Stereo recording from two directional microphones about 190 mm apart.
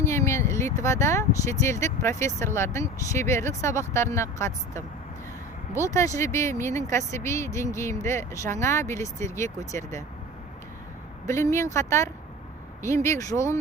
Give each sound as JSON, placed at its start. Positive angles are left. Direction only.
{"t": 0.0, "sound": "speech", "side_deg": 15}
{"t": 11.3, "sound": "speech", "side_deg": 15}